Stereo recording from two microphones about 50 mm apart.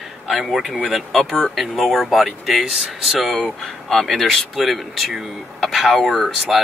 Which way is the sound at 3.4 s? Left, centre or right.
Centre.